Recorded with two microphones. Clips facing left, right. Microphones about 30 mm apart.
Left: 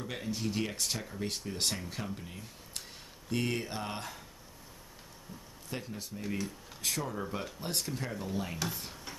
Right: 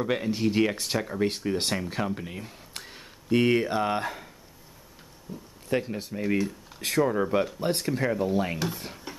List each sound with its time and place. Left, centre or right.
0.0 s speech: right
5.3 s speech: centre
5.7 s speech: right
7.1 s speech: right
8.5 s stir: centre